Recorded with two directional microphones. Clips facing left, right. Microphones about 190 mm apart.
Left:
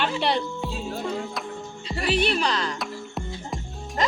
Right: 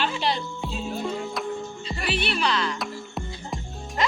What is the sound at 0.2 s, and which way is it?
Music, 60° left (ahead or behind).